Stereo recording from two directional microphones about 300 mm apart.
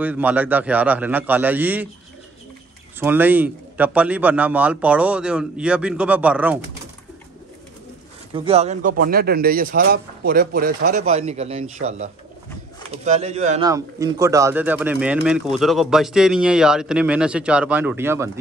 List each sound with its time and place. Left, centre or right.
0.0 s a man's voice: centre
3.0 s a man's voice: centre
8.4 s speech: centre
13.7 s a man's voice: centre